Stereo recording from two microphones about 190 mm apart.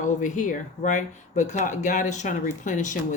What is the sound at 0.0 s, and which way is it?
Speech, 40° left (ahead or behind).